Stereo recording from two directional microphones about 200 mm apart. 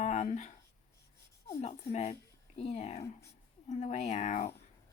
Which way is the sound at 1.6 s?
35° left (ahead or behind).